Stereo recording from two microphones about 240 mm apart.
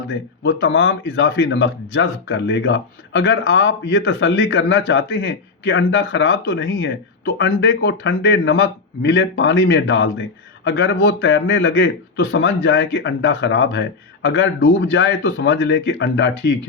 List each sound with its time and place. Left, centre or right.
0.1 s speech: left